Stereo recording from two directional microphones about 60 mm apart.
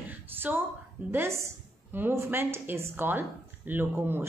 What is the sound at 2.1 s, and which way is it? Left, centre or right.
A woman's voice, right.